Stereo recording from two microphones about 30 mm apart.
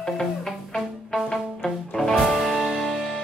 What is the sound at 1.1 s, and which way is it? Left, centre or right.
Music, centre.